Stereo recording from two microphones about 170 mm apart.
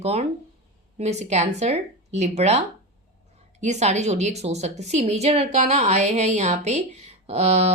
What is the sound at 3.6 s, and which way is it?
A woman's voice, 40° right (ahead or behind).